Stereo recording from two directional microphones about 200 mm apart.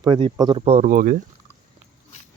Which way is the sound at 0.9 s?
45° right (ahead or behind).